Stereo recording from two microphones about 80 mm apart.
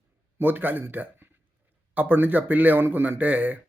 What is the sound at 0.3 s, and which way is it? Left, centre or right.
A man's voice, right.